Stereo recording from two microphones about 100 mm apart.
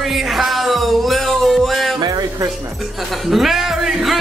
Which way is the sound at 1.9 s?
40° right (ahead or behind).